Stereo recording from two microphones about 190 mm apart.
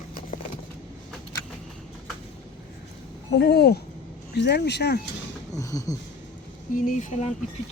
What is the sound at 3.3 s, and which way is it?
Speech, 60° left (ahead or behind).